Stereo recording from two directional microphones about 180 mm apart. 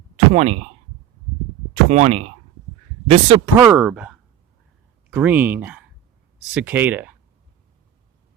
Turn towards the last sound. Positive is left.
turn(degrees=-10)  # may be behind; listen again after turning